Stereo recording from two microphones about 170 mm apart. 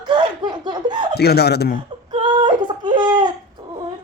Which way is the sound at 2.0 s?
25° right (ahead or behind).